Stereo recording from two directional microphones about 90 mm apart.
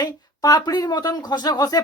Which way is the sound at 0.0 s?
50° left (ahead or behind).